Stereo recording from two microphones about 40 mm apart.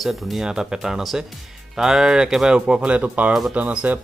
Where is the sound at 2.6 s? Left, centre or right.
Right.